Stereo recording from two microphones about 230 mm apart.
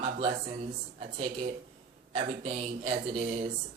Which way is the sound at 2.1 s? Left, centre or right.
Right.